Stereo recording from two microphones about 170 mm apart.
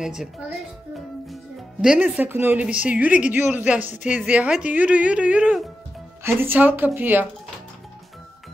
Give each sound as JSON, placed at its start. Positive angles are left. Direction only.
{"t": 0.0, "sound": "a child's voice", "side_deg": -5}